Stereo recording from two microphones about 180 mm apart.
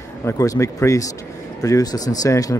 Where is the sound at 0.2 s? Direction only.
15° left (ahead or behind).